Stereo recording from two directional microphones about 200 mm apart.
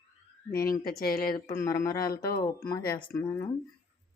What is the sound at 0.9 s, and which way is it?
Speech, 50° left (ahead or behind).